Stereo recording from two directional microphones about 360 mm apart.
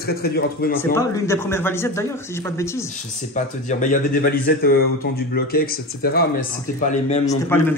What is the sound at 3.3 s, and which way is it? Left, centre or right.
Speech, left.